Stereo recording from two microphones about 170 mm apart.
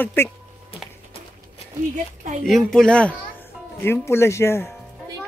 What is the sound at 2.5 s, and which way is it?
Speech, centre (ahead or behind).